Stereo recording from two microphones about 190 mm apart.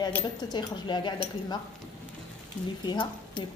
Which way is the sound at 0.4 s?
20° left (ahead or behind).